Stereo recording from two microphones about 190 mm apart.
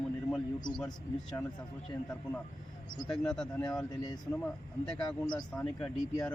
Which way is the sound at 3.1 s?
5° left (ahead or behind).